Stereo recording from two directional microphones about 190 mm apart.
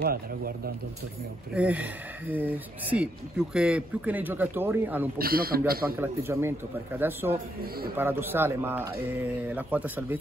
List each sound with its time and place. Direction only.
0.0 s speech: 50° right (ahead or behind)
1.5 s speech: 5° right (ahead or behind)
5.2 s speech: 50° right (ahead or behind)
5.9 s speech: 10° right (ahead or behind)